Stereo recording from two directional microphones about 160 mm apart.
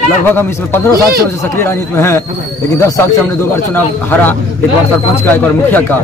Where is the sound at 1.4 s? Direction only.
15° left (ahead or behind).